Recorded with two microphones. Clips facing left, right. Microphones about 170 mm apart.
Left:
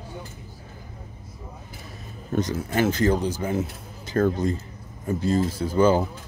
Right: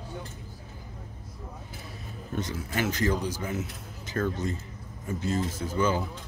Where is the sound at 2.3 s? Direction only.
40° left (ahead or behind).